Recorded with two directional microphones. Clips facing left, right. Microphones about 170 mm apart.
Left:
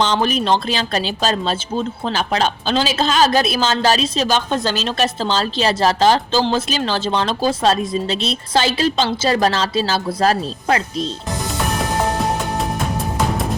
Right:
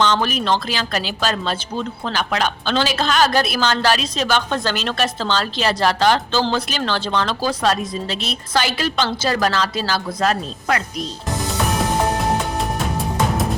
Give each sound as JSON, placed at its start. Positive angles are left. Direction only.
{"t": 0.0, "sound": "a woman's voice", "side_deg": 20}